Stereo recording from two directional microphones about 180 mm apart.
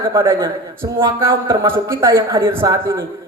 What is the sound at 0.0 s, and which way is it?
A man's voice, 15° right (ahead or behind).